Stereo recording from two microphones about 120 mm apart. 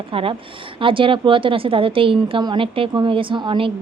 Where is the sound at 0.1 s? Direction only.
50° right (ahead or behind).